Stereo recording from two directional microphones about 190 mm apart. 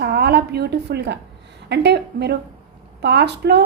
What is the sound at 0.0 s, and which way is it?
A woman's voice, 60° right (ahead or behind).